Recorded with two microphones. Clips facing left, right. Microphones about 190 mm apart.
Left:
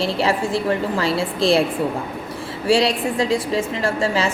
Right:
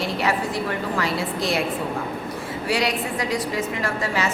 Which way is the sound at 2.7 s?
30° left (ahead or behind).